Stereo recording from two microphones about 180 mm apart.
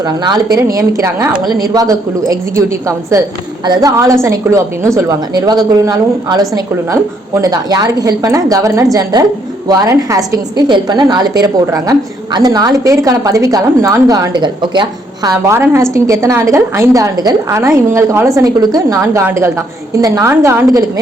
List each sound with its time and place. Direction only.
0.0 s a woman's voice: 20° right (ahead or behind)